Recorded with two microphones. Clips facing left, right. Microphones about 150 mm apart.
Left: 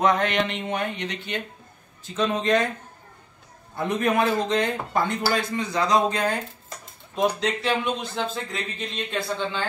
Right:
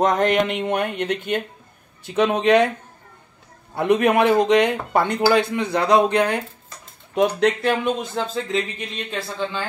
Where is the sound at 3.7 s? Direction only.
70° right (ahead or behind); by 8.4 s 45° right (ahead or behind).